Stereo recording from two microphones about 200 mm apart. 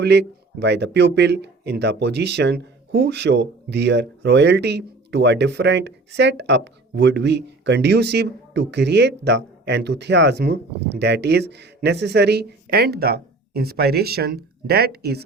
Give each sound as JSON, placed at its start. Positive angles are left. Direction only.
{"t": 0.0, "sound": "speech", "side_deg": -55}